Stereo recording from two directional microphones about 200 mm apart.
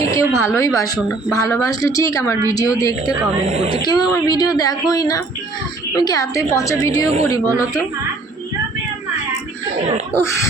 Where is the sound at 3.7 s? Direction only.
20° left (ahead or behind).